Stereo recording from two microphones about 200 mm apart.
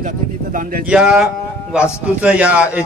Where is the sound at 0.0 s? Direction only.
40° right (ahead or behind).